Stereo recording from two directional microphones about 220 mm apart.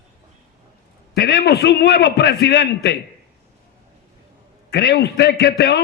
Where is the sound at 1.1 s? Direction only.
45° left (ahead or behind).